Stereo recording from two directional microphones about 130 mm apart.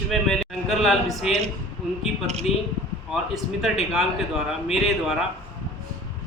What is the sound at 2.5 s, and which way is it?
Speech, 55° left (ahead or behind).